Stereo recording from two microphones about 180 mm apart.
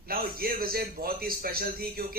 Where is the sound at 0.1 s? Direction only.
55° right (ahead or behind).